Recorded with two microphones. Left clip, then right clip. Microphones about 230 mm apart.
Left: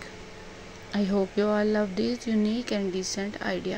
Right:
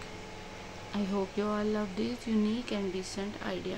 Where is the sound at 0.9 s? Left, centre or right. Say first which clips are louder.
Left 7 dB; centre.